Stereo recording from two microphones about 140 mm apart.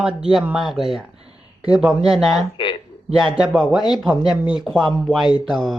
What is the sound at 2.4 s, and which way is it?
Speech, 35° left (ahead or behind).